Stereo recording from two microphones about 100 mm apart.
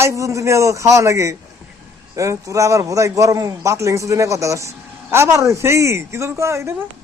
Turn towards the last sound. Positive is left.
turn(degrees=-30)  # may be behind; listen again after turning